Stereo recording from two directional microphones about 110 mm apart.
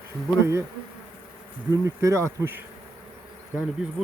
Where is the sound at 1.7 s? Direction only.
30° right (ahead or behind).